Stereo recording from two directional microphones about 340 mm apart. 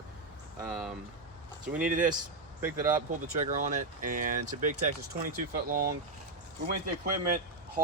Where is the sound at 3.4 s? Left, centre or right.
Right.